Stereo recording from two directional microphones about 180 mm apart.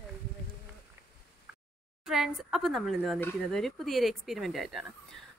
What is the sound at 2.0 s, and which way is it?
Speech, centre (ahead or behind).